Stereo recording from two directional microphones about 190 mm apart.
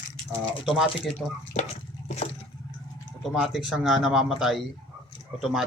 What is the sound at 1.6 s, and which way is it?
Water, 35° left (ahead or behind).